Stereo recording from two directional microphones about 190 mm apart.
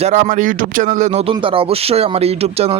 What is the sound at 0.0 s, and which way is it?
Speech, 40° right (ahead or behind).